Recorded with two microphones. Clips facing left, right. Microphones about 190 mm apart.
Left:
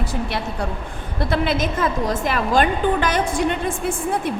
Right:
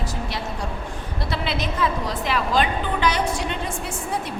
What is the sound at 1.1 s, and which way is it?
A woman's voice, 50° left (ahead or behind).